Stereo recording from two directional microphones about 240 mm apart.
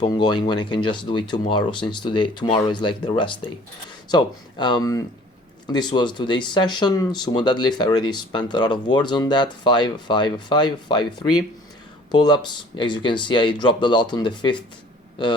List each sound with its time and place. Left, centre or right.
0.0 s speech: centre